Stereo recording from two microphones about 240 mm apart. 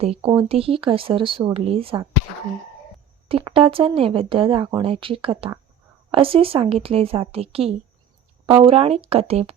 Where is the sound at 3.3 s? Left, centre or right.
Right.